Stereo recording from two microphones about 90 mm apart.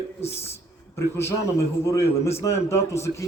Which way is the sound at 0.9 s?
30° left (ahead or behind).